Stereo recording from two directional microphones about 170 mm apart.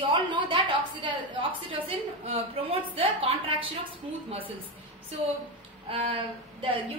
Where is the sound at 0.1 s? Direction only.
30° right (ahead or behind).